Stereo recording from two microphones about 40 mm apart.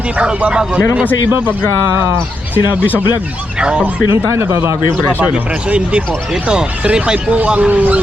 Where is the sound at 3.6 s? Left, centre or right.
Right.